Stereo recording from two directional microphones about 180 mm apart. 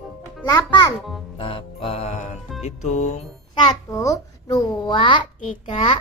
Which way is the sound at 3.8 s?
15° left (ahead or behind).